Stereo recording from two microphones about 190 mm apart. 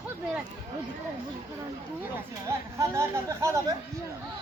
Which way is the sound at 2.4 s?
15° right (ahead or behind).